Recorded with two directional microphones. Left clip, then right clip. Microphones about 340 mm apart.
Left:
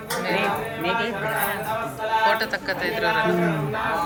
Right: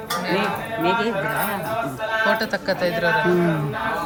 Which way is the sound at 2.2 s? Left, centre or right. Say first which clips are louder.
Right 3 dB; centre.